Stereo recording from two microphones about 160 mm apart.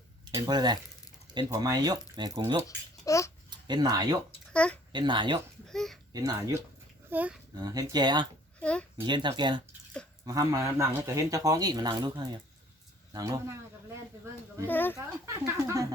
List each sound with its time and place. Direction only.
0.3 s speech: 25° right (ahead or behind)
2.6 s a child's voice: 20° left (ahead or behind)
3.5 s speech: 25° right (ahead or behind)
4.5 s a child's voice: 5° left (ahead or behind)
4.9 s speech: 30° right (ahead or behind)
5.6 s speech: centre (ahead or behind)
6.1 s speech: 25° right (ahead or behind)
7.1 s a child's voice: 10° right (ahead or behind)
7.5 s speech: 25° right (ahead or behind)
8.6 s a child's voice: 5° left (ahead or behind)
9.0 s speech: 30° right (ahead or behind)
14.7 s a child's voice: 10° left (ahead or behind)
15.4 s speech: 20° right (ahead or behind)